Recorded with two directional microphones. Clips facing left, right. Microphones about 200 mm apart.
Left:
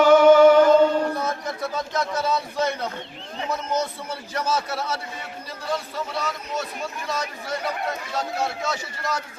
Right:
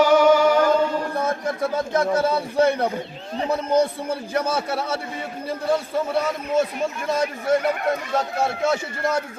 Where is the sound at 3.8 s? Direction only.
55° right (ahead or behind).